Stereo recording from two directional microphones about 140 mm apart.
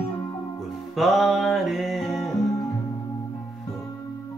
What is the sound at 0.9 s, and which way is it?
Music, centre (ahead or behind).